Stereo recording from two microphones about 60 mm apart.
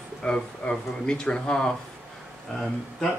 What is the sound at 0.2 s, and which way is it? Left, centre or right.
Speech, centre.